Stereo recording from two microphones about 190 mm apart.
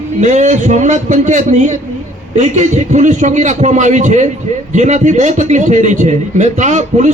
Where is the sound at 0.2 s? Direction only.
40° right (ahead or behind).